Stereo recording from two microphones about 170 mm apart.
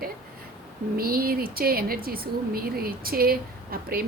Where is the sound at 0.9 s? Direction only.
60° right (ahead or behind).